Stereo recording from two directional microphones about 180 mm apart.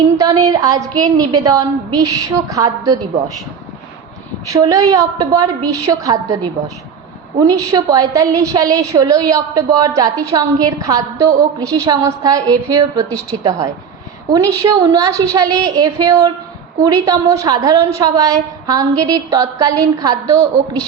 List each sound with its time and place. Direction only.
0.2 s a woman's voice: 20° right (ahead or behind)
4.4 s a woman's voice: 20° right (ahead or behind)